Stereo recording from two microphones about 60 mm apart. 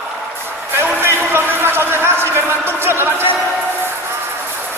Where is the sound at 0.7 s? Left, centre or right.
Right.